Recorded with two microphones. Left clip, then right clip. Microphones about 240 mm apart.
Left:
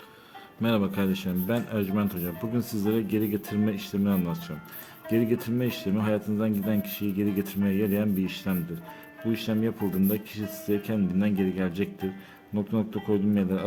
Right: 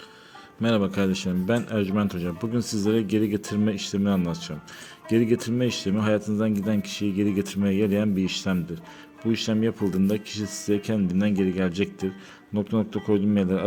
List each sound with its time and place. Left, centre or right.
0.6 s a man's voice: centre